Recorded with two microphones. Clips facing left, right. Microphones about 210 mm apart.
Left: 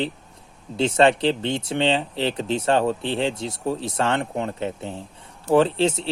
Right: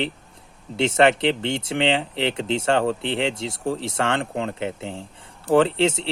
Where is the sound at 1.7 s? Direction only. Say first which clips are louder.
Even; 80° right.